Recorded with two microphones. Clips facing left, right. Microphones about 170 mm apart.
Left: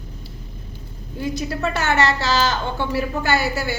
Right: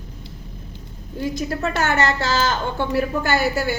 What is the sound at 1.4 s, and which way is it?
Speech, 45° right (ahead or behind).